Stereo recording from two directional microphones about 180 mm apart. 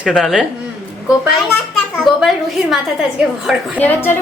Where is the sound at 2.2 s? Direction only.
Centre (ahead or behind).